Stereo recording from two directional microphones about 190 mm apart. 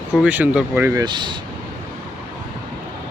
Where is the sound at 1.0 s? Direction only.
25° right (ahead or behind).